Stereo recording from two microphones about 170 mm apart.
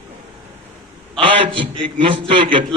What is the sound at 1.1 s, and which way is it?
A man's voice, 30° right (ahead or behind).